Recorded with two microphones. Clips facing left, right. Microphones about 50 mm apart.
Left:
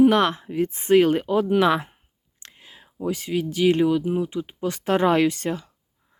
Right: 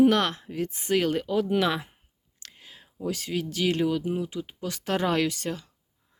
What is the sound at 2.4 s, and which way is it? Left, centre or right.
Whispering, centre.